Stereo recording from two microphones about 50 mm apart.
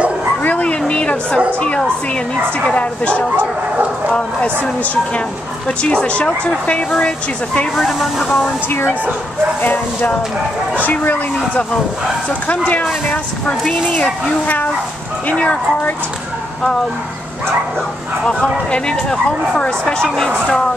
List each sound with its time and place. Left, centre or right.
0.4 s a sound: left
2.7 s speech: left
5.7 s speech: left
9.6 s speech: left
14.4 s speech: left
15.2 s speech: left
18.4 s speech: left
19.8 s speech: centre